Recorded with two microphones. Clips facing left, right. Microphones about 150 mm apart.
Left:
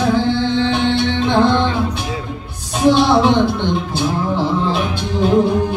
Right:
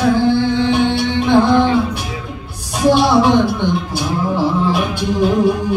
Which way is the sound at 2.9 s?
15° right (ahead or behind).